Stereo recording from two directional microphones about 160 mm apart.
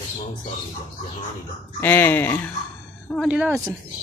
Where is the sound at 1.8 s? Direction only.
10° left (ahead or behind).